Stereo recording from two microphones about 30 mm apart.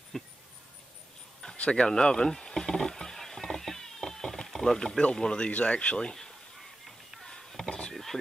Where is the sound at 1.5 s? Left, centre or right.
Left.